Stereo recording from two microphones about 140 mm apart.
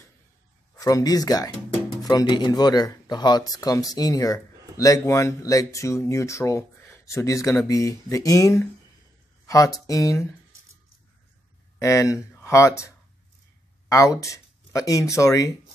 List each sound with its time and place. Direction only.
0.7 s speech: 25° left (ahead or behind)
11.8 s speech: 20° left (ahead or behind)
13.8 s speech: 25° left (ahead or behind)